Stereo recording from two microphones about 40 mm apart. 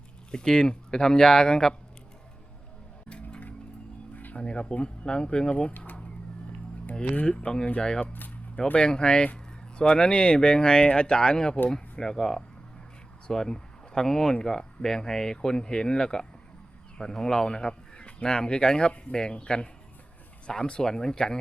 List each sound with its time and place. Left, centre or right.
0.3 s speech: centre
3.1 s music: left
4.1 s music: left
4.4 s speech: left
5.7 s speech: left
6.9 s speech: left
8.0 s speech: left
8.8 s speech: left